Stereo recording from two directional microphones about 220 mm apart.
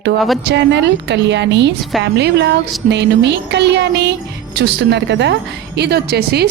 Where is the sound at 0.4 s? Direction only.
50° right (ahead or behind).